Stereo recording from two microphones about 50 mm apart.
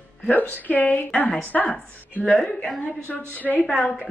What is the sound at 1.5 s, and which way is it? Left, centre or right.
Speech, left.